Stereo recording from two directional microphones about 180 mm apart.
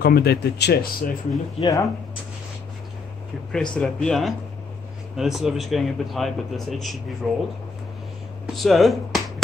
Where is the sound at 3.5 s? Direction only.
5° left (ahead or behind).